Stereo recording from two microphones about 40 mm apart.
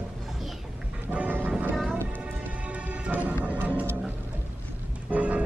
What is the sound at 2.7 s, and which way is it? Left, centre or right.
Music, right.